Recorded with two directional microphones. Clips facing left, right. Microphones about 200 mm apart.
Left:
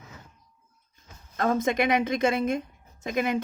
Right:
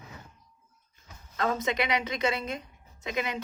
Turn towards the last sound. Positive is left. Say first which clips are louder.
# left 6 dB
turn(degrees=50)  # may be behind; listen again after turning